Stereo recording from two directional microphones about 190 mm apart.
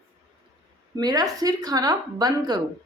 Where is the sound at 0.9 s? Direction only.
20° right (ahead or behind).